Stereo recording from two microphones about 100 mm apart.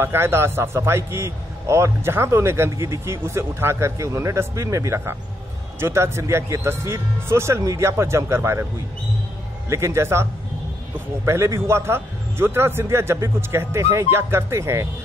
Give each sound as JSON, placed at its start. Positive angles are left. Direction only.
{"t": 0.0, "sound": "a man's voice", "side_deg": -25}
{"t": 9.7, "sound": "a man's voice", "side_deg": -30}
{"t": 11.2, "sound": "a man's voice", "side_deg": -30}